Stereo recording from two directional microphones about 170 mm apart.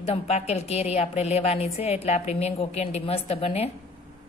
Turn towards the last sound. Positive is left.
turn(degrees=35)  # may be behind; listen again after turning